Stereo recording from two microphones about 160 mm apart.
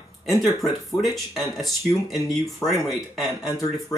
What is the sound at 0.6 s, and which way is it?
Speech, centre (ahead or behind).